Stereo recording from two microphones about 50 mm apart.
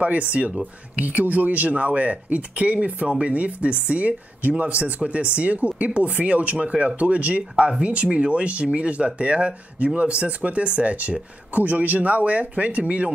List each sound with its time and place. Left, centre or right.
0.0 s speech: right